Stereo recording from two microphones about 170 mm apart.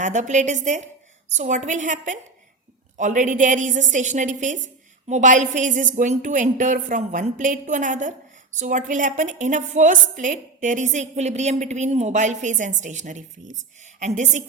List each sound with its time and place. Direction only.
0.0 s a woman's voice: 45° right (ahead or behind)